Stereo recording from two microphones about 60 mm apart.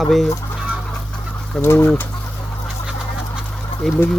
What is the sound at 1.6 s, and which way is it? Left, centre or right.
Speech, left.